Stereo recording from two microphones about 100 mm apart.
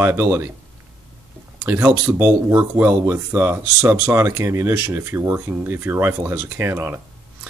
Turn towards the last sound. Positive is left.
turn(degrees=-25)  # may be behind; listen again after turning